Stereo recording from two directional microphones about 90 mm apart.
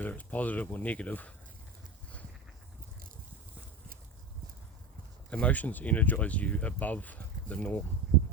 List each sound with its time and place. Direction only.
0.0 s speech: 15° left (ahead or behind)
5.3 s speech: 15° left (ahead or behind)